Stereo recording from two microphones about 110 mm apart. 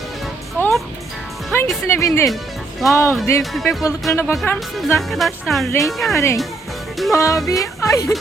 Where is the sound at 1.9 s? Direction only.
25° left (ahead or behind).